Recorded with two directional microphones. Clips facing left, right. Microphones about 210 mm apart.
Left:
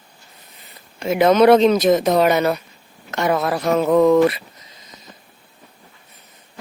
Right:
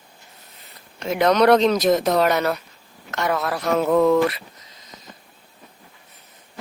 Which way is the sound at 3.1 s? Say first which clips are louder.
Left 4 dB; 20° left (ahead or behind).